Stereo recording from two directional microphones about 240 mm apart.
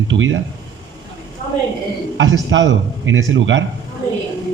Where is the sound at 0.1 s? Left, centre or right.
Right.